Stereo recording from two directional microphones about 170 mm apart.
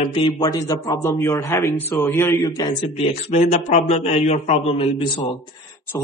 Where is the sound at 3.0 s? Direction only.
40° left (ahead or behind).